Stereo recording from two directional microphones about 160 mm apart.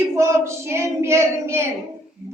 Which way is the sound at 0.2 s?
15° right (ahead or behind).